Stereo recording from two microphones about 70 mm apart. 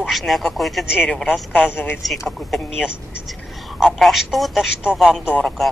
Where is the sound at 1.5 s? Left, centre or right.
Left.